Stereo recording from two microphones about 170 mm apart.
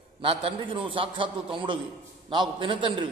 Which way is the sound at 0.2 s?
30° right (ahead or behind).